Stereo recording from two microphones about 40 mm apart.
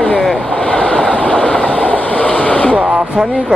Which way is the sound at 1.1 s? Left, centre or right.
Left.